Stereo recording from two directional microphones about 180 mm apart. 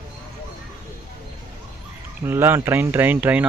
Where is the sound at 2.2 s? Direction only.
15° right (ahead or behind).